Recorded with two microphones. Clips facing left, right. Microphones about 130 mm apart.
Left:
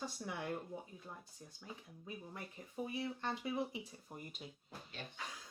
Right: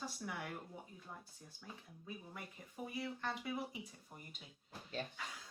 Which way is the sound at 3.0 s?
25° left (ahead or behind).